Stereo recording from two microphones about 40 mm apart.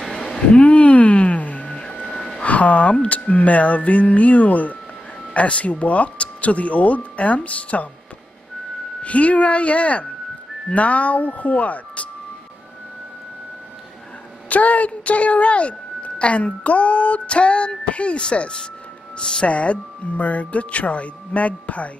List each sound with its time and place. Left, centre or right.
0.0 s a sound: centre
0.3 s a sound: left
1.7 s vehicle: left
2.4 s a woman's voice: left
9.0 s a woman's voice: left
14.5 s a woman's voice: left